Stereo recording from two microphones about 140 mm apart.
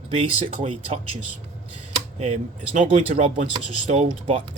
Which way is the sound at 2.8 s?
60° right (ahead or behind).